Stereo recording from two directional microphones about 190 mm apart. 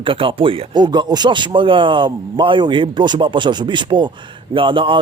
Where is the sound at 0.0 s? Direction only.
30° right (ahead or behind).